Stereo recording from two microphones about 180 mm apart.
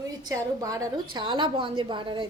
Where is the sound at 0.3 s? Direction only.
20° right (ahead or behind).